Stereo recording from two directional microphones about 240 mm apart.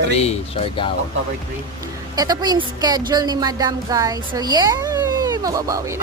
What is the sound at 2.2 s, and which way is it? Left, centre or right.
A woman's voice, centre.